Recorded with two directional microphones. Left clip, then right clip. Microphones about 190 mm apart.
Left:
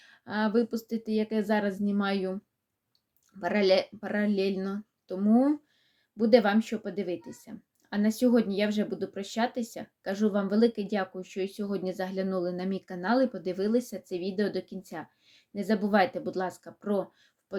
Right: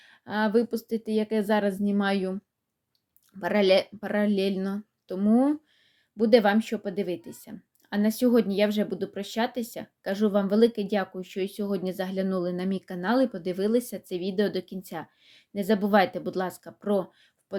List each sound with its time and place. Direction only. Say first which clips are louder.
0.0 s a woman's voice: right 3 dB; 20° right (ahead or behind)